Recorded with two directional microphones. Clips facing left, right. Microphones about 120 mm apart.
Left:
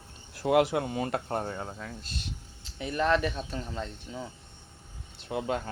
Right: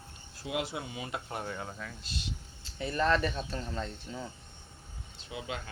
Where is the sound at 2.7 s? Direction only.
15° left (ahead or behind).